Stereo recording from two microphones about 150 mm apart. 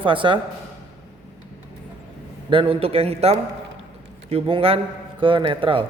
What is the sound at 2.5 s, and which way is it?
A man's voice, 35° right (ahead or behind).